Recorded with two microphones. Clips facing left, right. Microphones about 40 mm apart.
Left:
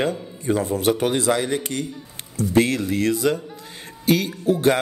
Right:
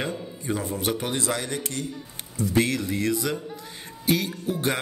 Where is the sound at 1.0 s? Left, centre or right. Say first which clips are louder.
Left 7 dB; left.